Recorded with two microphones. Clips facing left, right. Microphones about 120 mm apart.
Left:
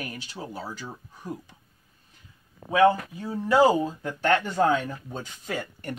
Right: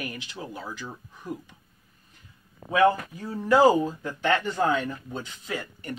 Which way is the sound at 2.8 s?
20° left (ahead or behind).